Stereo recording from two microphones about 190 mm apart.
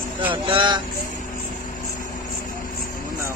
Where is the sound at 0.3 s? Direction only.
25° right (ahead or behind).